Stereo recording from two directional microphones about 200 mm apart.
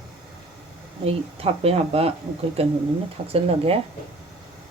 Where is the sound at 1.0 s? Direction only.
30° right (ahead or behind).